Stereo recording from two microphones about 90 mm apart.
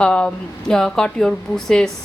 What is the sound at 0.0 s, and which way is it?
A woman's voice, 10° left (ahead or behind).